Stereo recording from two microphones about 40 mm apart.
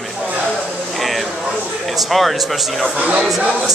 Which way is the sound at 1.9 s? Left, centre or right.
Centre.